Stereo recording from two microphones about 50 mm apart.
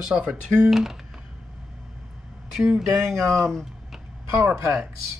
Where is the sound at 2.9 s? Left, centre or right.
Right.